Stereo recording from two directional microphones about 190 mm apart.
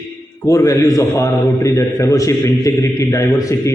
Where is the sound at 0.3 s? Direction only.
15° left (ahead or behind).